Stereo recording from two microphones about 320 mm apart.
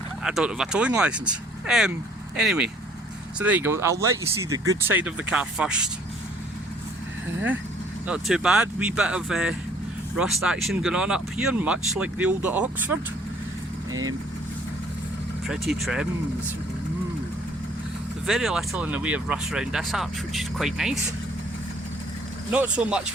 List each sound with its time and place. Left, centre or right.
0.2 s speech: centre
8.0 s speech: centre
13.9 s speech: right
15.4 s speech: centre
18.3 s speech: centre
22.5 s speech: centre